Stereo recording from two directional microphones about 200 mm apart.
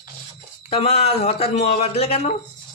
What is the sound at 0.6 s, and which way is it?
A man's voice, 30° left (ahead or behind).